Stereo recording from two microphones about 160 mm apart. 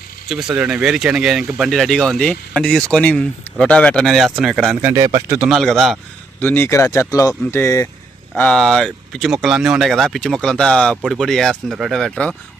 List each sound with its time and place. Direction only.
0.3 s speech: 5° right (ahead or behind)
4.9 s a man's voice: 20° right (ahead or behind)
5.3 s speech: 5° right (ahead or behind)
6.4 s speech: 15° left (ahead or behind)
8.4 s speech: 5° left (ahead or behind)